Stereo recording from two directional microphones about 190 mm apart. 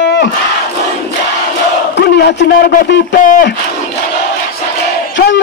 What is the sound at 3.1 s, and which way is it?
Speech, 45° left (ahead or behind).